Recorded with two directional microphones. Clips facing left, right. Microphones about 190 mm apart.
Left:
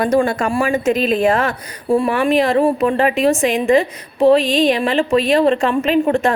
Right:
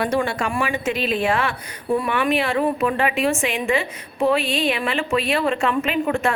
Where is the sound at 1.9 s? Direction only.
30° left (ahead or behind).